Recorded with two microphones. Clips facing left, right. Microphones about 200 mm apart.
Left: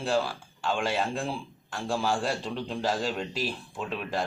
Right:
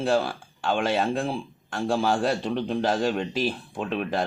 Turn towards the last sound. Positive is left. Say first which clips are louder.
# right 5 dB
turn(degrees=-55)  # may be behind; listen again after turning